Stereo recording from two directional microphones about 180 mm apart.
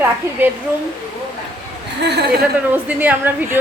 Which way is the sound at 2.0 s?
70° right (ahead or behind).